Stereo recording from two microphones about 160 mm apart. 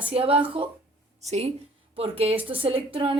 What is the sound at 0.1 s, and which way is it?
A woman's voice, 35° right (ahead or behind).